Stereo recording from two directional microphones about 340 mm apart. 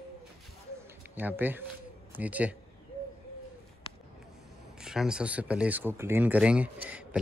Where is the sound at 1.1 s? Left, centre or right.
Centre.